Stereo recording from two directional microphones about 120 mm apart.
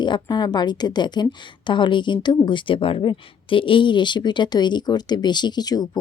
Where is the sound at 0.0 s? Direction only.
40° left (ahead or behind).